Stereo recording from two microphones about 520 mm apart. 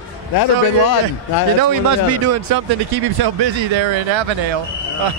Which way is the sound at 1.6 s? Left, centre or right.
Right.